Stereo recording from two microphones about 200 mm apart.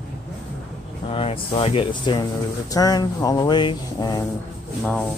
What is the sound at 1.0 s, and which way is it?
Speech, 25° left (ahead or behind).